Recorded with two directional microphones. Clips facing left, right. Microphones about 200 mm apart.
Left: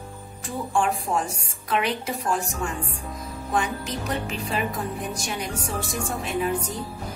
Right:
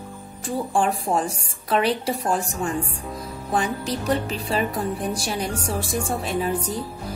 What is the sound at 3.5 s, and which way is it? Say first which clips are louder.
A woman's voice: right 3 dB; 35° right (ahead or behind).